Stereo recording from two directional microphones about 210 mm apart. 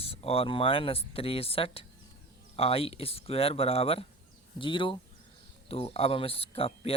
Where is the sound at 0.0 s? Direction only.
25° left (ahead or behind).